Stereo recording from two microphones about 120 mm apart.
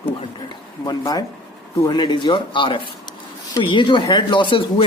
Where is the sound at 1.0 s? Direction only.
30° left (ahead or behind).